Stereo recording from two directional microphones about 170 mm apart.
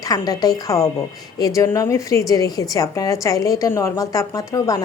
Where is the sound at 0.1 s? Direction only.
20° left (ahead or behind).